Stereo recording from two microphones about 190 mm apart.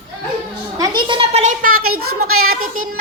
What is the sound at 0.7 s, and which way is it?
A woman's voice, 20° right (ahead or behind).